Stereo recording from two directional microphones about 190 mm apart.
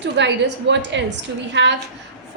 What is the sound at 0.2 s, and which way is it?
A woman's voice, 65° right (ahead or behind).